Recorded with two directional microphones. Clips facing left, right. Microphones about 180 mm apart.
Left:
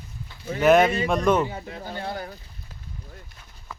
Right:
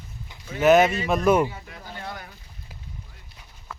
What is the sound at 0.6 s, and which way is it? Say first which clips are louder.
Speech: even; centre (ahead or behind).